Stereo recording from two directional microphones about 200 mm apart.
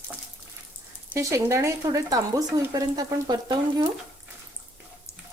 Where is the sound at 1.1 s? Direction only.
15° right (ahead or behind).